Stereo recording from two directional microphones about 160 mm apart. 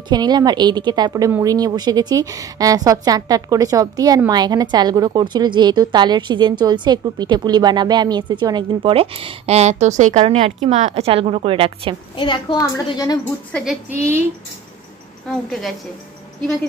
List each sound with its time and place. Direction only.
0.1 s a woman's voice: 25° right (ahead or behind)
12.2 s a woman's voice: 30° left (ahead or behind)
13.7 s a woman's voice: 15° right (ahead or behind)